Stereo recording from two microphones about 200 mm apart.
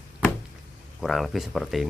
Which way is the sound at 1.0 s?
Centre (ahead or behind).